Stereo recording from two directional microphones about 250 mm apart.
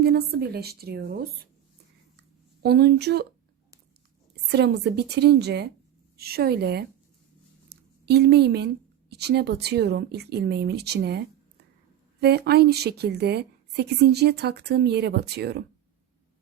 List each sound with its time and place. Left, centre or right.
0.0 s a woman's voice: right
2.6 s a woman's voice: right
4.5 s a woman's voice: right
12.2 s a woman's voice: right